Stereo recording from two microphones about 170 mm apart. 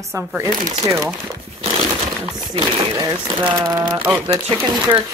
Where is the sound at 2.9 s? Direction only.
20° right (ahead or behind).